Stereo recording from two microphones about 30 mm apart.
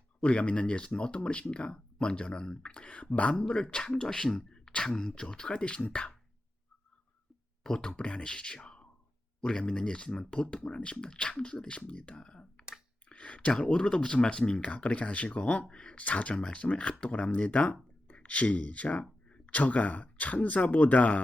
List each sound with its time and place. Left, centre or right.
0.2 s speech: left
3.4 s a man's voice: left
5.5 s speech: left
7.8 s speech: left
8.5 s a sound: left
9.4 s a man's voice: left
13.1 s a sound: left
13.5 s speech: left
15.7 s speech: left
16.0 s speech: left